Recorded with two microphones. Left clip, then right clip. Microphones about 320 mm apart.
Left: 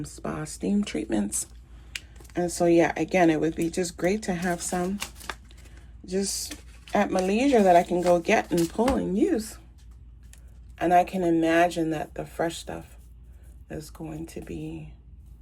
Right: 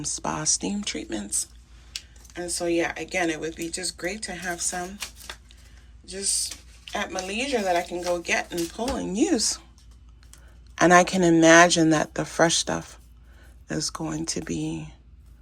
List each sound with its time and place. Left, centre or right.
0.0 s speech: centre
6.1 s speech: centre
8.8 s speech: centre
10.8 s speech: centre
14.4 s speech: centre